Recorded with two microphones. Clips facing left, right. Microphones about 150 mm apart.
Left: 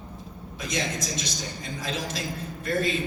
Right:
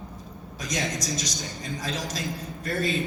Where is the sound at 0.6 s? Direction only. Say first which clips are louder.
Even; 40° right (ahead or behind).